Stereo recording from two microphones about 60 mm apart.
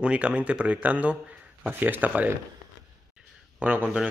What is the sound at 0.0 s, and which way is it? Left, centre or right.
Speech, centre.